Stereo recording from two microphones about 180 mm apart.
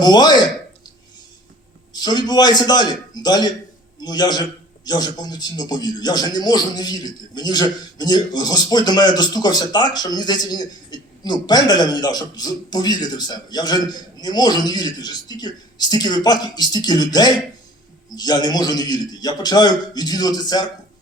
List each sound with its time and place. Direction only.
0.0 s a man's voice: 25° left (ahead or behind)
1.9 s a man's voice: 25° left (ahead or behind)